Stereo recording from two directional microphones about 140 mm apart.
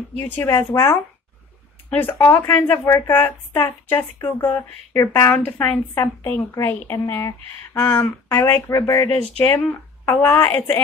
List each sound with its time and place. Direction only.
0.2 s a woman's voice: 15° left (ahead or behind)
8.3 s speech: 25° left (ahead or behind)
9.4 s a woman's voice: 15° left (ahead or behind)